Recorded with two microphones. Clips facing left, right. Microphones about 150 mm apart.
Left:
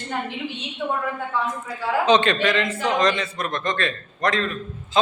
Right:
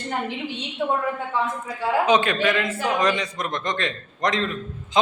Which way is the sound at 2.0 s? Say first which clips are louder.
Left 3 dB; 10° right (ahead or behind).